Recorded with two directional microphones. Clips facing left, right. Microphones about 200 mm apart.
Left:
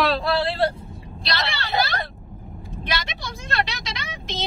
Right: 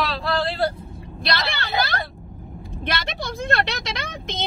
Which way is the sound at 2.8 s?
55° right (ahead or behind).